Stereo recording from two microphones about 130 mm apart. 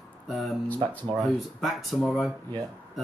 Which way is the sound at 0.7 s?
30° right (ahead or behind).